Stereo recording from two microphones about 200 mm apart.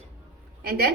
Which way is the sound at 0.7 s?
50° right (ahead or behind).